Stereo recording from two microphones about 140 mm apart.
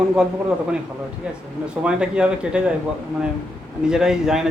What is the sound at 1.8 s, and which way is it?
Speech, 5° right (ahead or behind).